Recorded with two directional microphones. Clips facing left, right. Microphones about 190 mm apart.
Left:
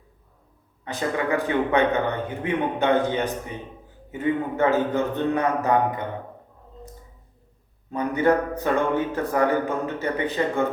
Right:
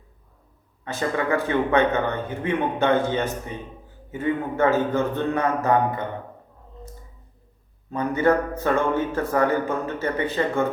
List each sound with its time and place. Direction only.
0.9 s speech: 15° left (ahead or behind)
7.9 s speech: 15° left (ahead or behind)